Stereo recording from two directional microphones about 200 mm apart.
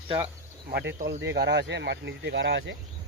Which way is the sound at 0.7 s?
60° right (ahead or behind).